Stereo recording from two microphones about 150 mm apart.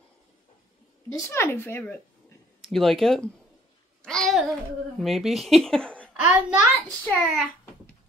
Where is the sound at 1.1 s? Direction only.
15° left (ahead or behind).